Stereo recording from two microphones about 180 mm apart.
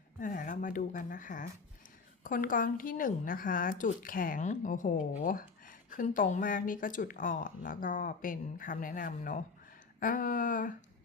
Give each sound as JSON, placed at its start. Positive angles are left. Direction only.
{"t": 0.2, "sound": "speech", "side_deg": 45}